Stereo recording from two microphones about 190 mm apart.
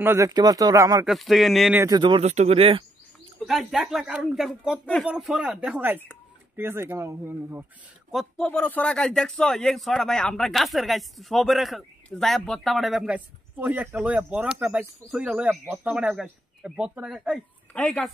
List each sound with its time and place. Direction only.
0.0 s speech: 15° right (ahead or behind)
1.0 s speech: centre (ahead or behind)
1.8 s speech: 20° right (ahead or behind)
3.4 s speech: centre (ahead or behind)
8.1 s speech: centre (ahead or behind)